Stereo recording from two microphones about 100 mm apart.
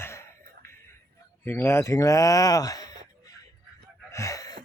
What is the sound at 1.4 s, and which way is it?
Speech, 20° left (ahead or behind).